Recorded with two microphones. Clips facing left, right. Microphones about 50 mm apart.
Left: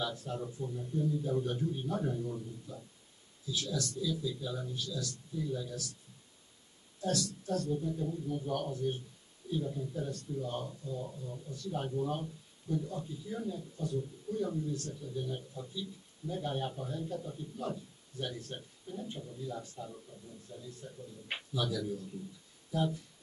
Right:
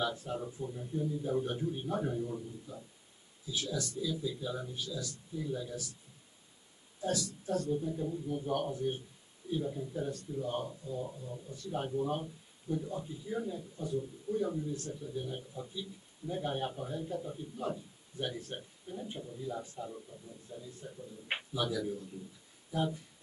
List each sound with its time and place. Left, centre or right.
0.0 s speech: centre
7.0 s speech: centre